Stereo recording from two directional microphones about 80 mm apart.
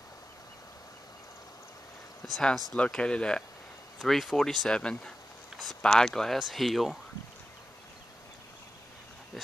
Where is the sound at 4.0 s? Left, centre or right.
Centre.